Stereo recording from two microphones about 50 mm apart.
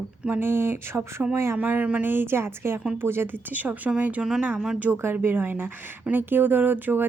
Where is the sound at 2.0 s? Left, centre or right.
Right.